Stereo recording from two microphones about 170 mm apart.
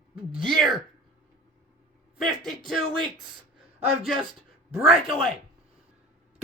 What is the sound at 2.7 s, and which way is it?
Speech, centre (ahead or behind).